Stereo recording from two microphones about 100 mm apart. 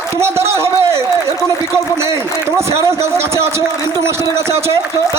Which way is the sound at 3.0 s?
25° right (ahead or behind).